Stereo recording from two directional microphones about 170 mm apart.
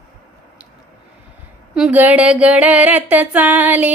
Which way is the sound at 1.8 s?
5° right (ahead or behind).